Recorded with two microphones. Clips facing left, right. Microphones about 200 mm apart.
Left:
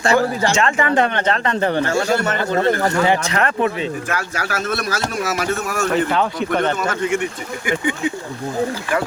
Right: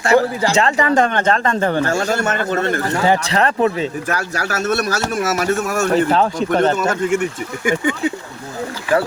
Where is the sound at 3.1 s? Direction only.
35° right (ahead or behind).